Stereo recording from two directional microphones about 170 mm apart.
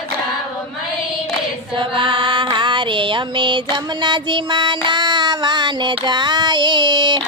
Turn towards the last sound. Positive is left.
turn(degrees=-25)  # may be behind; listen again after turning